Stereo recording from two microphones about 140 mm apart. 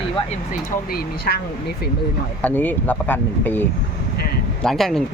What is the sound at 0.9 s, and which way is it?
Speech, 90° left.